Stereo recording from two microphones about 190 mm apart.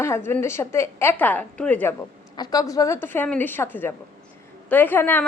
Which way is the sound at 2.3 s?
20° left (ahead or behind).